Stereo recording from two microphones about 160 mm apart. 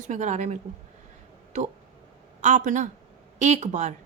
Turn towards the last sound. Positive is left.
turn(degrees=-45)  # may be behind; listen again after turning